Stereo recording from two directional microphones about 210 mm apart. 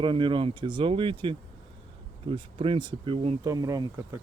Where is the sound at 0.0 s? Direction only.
25° right (ahead or behind).